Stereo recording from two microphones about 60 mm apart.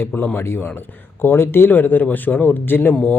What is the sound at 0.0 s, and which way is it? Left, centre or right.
Speech, left.